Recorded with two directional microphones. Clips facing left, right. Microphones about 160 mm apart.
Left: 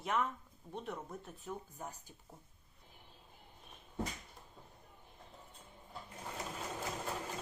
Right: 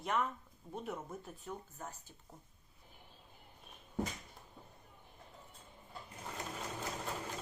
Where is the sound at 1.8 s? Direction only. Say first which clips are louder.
Left 1 dB; 15° left (ahead or behind).